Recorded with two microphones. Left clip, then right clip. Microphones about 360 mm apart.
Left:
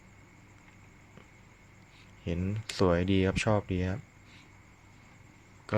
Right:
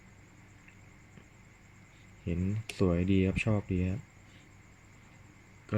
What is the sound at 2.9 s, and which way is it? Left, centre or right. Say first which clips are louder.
Speech: left 2 dB; centre.